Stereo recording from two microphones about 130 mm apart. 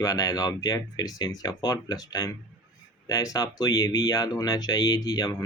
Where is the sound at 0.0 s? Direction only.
25° left (ahead or behind).